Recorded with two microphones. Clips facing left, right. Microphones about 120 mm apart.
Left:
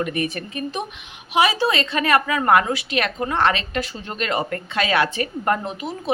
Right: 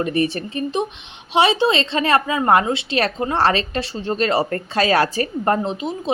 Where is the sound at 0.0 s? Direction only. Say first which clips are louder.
Right 4 dB; 35° right (ahead or behind).